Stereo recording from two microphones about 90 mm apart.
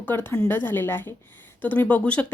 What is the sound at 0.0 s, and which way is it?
A woman's voice, 20° left (ahead or behind).